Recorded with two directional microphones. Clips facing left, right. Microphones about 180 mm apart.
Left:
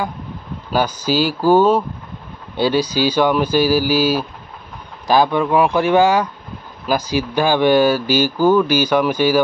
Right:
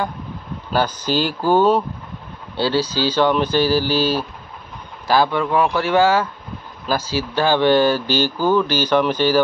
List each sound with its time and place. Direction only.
0.7 s speech: 10° left (ahead or behind)